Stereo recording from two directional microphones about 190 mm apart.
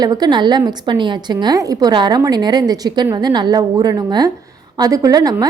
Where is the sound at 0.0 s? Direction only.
20° right (ahead or behind).